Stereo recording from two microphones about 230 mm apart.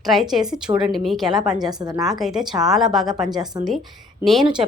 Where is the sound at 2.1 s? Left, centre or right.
Centre.